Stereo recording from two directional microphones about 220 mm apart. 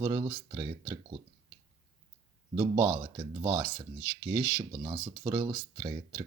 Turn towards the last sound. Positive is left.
turn(degrees=-10)  # may be behind; listen again after turning